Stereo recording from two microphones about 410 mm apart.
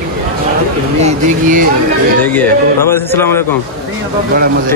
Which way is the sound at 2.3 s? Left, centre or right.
Centre.